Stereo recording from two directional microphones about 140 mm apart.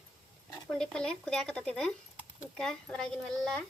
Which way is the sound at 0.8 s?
5° left (ahead or behind).